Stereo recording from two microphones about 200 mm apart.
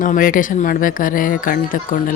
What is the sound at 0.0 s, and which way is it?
Speech, 45° left (ahead or behind).